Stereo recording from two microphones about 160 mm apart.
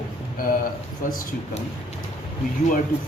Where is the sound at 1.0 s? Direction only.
55° left (ahead or behind).